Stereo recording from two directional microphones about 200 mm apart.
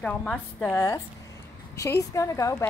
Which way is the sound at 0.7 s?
15° left (ahead or behind).